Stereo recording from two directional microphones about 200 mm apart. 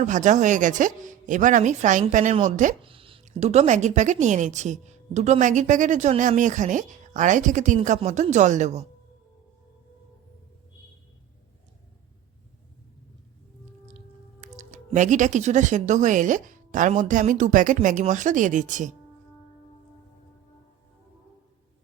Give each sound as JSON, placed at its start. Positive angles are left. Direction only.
{"t": 0.0, "sound": "a woman's voice", "side_deg": -40}
{"t": 14.4, "sound": "a woman's voice", "side_deg": -35}